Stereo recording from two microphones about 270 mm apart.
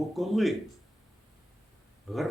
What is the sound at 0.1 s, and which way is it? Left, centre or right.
Speech, centre.